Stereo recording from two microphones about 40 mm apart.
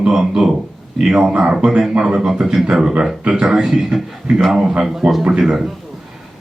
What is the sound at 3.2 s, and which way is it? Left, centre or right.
Speech, right.